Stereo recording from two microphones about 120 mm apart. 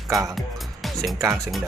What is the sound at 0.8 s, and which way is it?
Speech, centre (ahead or behind).